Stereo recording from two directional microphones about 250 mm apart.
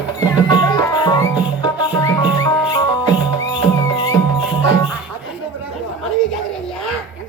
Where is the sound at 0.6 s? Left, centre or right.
Centre.